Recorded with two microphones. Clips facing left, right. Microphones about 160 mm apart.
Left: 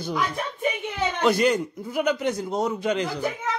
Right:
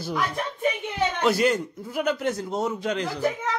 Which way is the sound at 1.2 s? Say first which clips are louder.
Left 2 dB; centre (ahead or behind).